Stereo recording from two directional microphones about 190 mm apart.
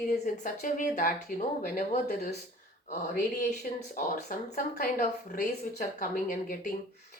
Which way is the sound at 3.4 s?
45° left (ahead or behind).